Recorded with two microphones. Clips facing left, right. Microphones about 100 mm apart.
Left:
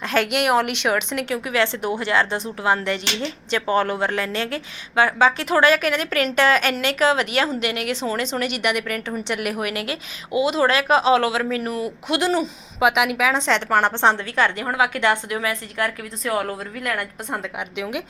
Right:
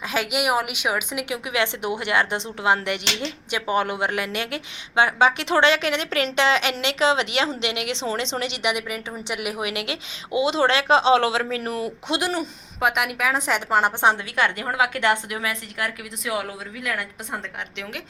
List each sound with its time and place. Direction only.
0.0 s a woman's voice: 5° right (ahead or behind); by 12.2 s 30° right (ahead or behind)
12.2 s a woman's voice: centre (ahead or behind)
14.5 s a woman's voice: 25° left (ahead or behind)
16.3 s speech: 45° left (ahead or behind)
16.7 s a woman's voice: 5° right (ahead or behind)
17.7 s speech: 15° left (ahead or behind)